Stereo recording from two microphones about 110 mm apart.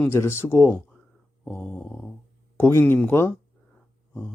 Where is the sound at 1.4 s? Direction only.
10° left (ahead or behind).